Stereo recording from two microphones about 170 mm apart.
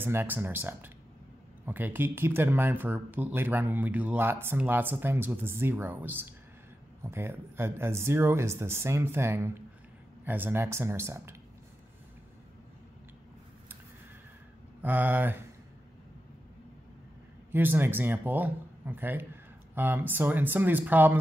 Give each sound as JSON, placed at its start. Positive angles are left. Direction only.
{"t": 0.0, "sound": "speech", "side_deg": -10}
{"t": 14.8, "sound": "speech", "side_deg": -10}
{"t": 17.5, "sound": "speech", "side_deg": -10}